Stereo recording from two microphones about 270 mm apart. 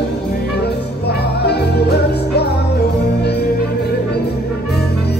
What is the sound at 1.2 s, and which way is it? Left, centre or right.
Music, left.